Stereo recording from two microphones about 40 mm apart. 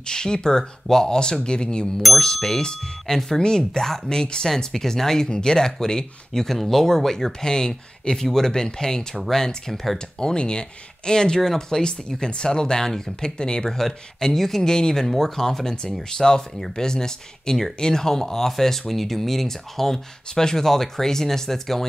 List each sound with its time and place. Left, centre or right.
0.0 s speech: centre